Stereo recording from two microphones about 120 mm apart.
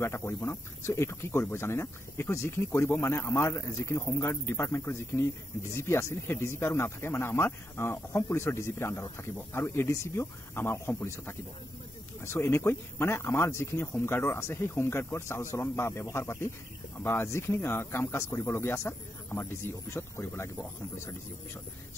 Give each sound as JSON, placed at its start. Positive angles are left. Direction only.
{"t": 0.0, "sound": "speech", "side_deg": 20}